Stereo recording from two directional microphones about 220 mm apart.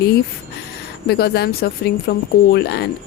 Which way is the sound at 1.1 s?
45° left (ahead or behind).